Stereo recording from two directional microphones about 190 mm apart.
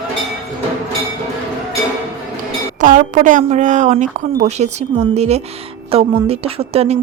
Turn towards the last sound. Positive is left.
turn(degrees=-30)  # may be behind; listen again after turning